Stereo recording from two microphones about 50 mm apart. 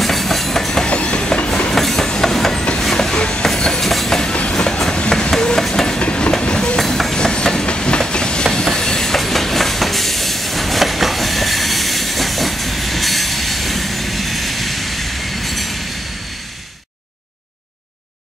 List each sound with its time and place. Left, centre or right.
0.0 s train: centre
0.8 s train: left
1.7 s train: centre
2.8 s a sound: centre
3.4 s train: centre
4.2 s train: left
5.9 s train: left
6.8 s train: centre
7.2 s train: centre